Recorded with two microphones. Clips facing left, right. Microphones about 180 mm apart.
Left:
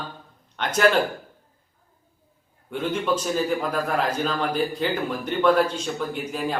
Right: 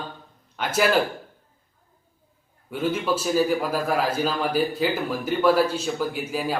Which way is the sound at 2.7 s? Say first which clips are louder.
Even; 5° right (ahead or behind).